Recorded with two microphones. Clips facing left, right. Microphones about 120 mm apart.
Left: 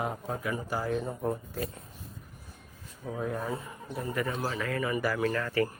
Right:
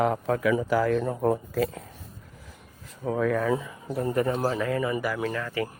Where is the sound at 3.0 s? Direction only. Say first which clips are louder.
Right 9 dB; 80° right.